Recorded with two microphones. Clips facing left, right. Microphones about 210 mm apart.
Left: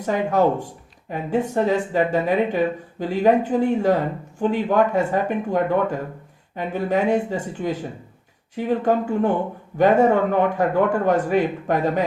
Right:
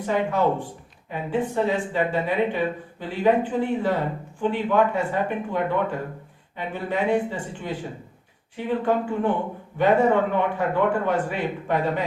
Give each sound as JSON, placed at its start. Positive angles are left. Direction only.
{"t": 0.0, "sound": "speech", "side_deg": 40}